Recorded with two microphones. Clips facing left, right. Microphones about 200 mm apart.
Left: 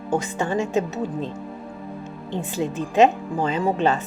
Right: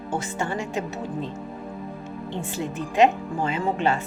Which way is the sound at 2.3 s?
20° left (ahead or behind).